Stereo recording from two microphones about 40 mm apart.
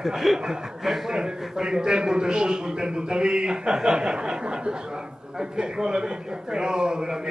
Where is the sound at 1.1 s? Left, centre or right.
Centre.